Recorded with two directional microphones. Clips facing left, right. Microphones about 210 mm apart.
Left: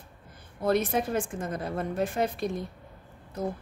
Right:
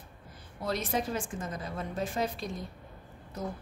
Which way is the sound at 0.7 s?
55° left (ahead or behind).